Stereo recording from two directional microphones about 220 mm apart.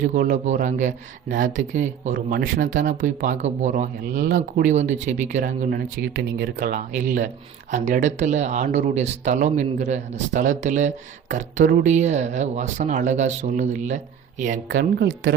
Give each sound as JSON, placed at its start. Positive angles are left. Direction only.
{"t": 0.0, "sound": "speech", "side_deg": -40}